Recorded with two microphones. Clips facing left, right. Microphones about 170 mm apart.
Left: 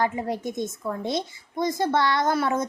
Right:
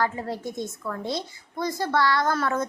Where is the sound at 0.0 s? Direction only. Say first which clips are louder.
Left 2 dB; 20° left (ahead or behind).